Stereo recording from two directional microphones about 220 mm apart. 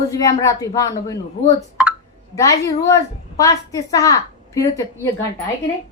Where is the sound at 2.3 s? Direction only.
15° left (ahead or behind).